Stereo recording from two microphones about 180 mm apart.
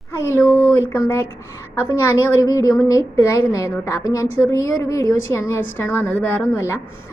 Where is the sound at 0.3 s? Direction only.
15° left (ahead or behind).